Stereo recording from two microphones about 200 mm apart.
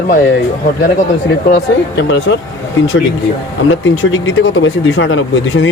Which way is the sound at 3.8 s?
75° left (ahead or behind).